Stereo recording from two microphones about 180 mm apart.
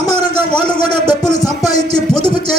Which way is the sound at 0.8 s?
25° left (ahead or behind).